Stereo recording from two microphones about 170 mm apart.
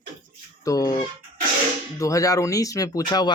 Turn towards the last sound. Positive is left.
turn(degrees=25)  # may be behind; listen again after turning